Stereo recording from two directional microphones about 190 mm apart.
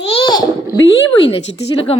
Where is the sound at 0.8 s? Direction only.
75° left (ahead or behind).